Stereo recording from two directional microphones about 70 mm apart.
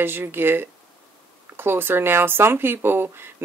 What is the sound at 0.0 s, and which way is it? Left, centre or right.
Speech, right.